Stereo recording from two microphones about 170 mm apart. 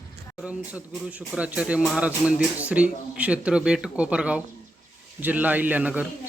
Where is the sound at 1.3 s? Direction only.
10° right (ahead or behind).